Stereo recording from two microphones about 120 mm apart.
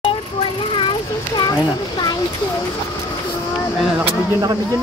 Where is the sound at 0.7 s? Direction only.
40° left (ahead or behind).